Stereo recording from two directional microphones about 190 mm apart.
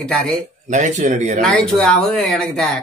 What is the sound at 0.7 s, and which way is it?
Speech, 40° right (ahead or behind).